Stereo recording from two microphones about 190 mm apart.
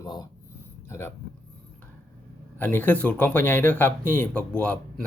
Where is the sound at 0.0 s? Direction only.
20° left (ahead or behind).